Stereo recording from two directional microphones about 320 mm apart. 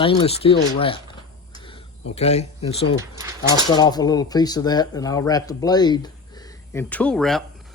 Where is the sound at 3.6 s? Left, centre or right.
Centre.